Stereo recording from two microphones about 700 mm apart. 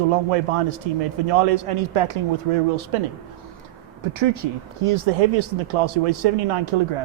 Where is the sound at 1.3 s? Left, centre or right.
Right.